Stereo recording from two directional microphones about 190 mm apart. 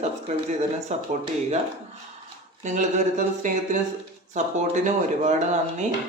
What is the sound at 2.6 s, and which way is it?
Speech, 40° right (ahead or behind).